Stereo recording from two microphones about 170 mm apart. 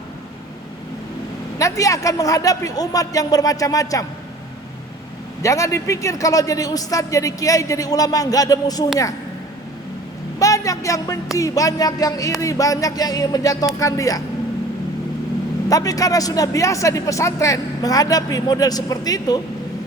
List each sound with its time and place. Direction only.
1.5 s speech: 20° left (ahead or behind)
5.4 s speech: 20° left (ahead or behind)
10.4 s a sound: 20° left (ahead or behind)
11.3 s speech: 20° left (ahead or behind)
15.7 s speech: 20° left (ahead or behind)